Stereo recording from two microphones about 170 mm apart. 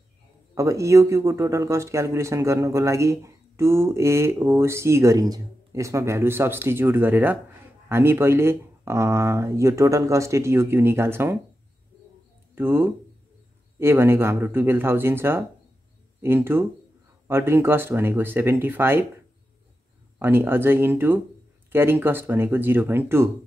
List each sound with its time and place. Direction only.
0.6 s speech: 20° right (ahead or behind)
12.5 s speech: 15° right (ahead or behind)
20.2 s speech: 15° right (ahead or behind)